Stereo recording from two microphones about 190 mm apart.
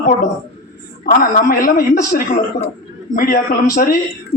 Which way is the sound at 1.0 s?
50° left (ahead or behind).